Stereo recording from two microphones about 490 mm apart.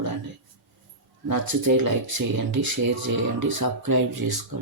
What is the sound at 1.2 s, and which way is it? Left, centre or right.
Speech, right.